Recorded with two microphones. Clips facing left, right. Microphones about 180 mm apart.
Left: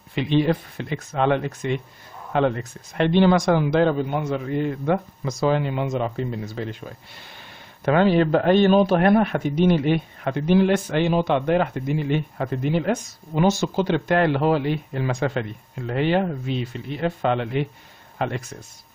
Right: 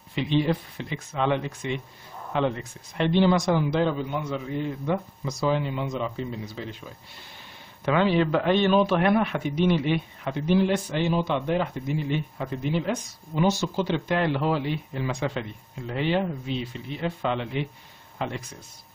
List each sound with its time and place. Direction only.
0.1 s speech: 60° left (ahead or behind); by 3.6 s 80° left
3.7 s a man's voice: 50° left (ahead or behind)
18.1 s a sound: 60° left (ahead or behind)